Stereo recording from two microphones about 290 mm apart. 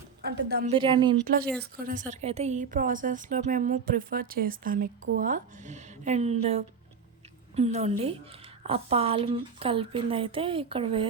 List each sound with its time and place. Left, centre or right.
0.2 s a woman's voice: right
0.7 s a woman's voice: centre